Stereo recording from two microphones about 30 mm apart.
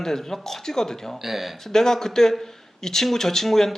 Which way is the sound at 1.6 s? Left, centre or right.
Centre.